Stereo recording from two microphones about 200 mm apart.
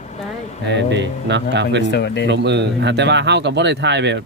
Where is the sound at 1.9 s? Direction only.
55° left (ahead or behind).